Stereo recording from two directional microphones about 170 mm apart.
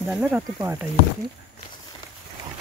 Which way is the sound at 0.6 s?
15° right (ahead or behind).